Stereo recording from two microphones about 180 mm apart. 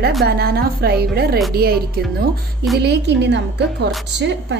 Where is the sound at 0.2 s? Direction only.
60° right (ahead or behind).